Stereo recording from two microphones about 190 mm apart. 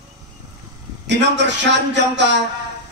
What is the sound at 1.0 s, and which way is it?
A man's voice, 65° right (ahead or behind).